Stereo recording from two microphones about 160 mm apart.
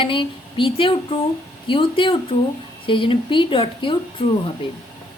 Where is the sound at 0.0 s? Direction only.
30° left (ahead or behind).